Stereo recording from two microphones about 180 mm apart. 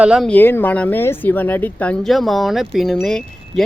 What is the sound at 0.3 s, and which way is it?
Speech, 10° left (ahead or behind).